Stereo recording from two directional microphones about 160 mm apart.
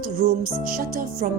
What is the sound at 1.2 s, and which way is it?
Music, 55° right (ahead or behind).